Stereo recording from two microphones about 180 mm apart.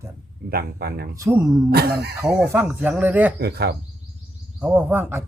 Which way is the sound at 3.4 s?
60° right (ahead or behind).